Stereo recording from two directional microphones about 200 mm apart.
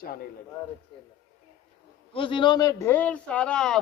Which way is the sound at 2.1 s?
25° left (ahead or behind).